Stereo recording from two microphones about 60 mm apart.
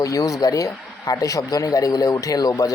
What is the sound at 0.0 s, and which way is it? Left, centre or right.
A man's voice, left.